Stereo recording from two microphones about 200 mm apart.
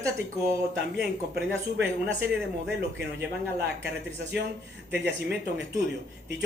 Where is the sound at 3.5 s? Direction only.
60° right (ahead or behind).